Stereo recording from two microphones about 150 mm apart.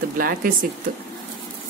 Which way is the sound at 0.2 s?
75° right (ahead or behind).